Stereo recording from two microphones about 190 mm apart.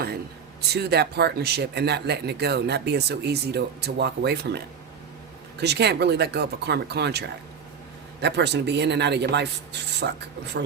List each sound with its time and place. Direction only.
0.7 s speech: 60° right (ahead or behind)